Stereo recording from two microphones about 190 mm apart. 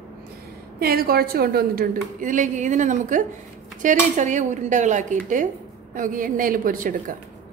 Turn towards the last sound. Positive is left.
turn(degrees=-45)  # may be behind; listen again after turning